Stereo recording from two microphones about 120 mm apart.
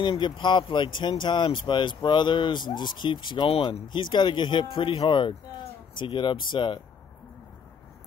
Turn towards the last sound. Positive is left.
turn(degrees=40)  # may be behind; listen again after turning